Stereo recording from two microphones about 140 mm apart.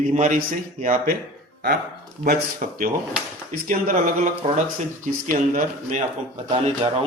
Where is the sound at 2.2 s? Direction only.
75° right (ahead or behind).